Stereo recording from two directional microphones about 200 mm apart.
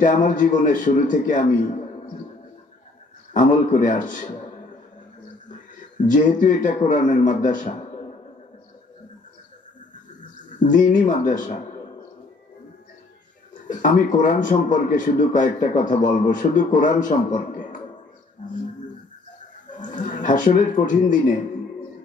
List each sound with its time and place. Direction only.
0.0 s a man's voice: 40° left (ahead or behind)
3.3 s a man's voice: 40° left (ahead or behind)
5.5 s a man's voice: 40° left (ahead or behind)
10.6 s a man's voice: 40° left (ahead or behind)
13.7 s a man's voice: 40° left (ahead or behind)
19.7 s speech: 40° left (ahead or behind)